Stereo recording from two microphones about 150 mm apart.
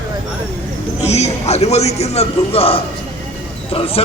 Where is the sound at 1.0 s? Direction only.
45° left (ahead or behind).